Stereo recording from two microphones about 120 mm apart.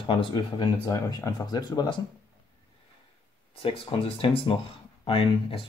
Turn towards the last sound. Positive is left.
turn(degrees=50)  # may be behind; listen again after turning